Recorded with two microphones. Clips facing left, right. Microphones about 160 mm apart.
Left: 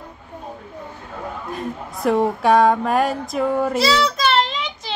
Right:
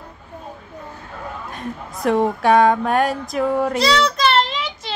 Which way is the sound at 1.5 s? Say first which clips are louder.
Left 2 dB; centre (ahead or behind).